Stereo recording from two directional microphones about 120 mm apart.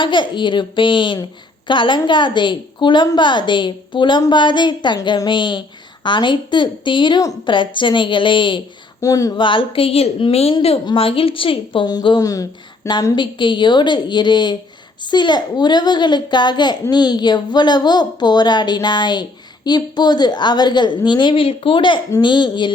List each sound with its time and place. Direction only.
0.0 s speech: 40° left (ahead or behind)
9.0 s speech: 30° left (ahead or behind)
9.4 s a woman's voice: 45° left (ahead or behind)
11.9 s speech: 35° left (ahead or behind)